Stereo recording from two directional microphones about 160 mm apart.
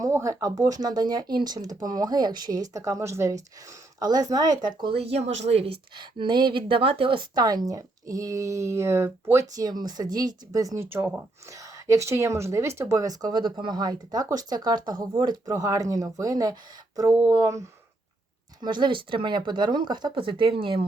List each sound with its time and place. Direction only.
0.0 s speech: 20° right (ahead or behind)